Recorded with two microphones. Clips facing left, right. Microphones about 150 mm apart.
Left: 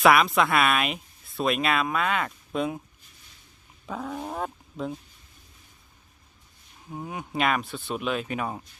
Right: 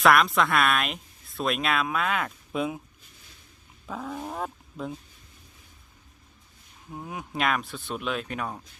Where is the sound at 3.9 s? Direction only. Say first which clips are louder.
Left 1 dB; centre (ahead or behind).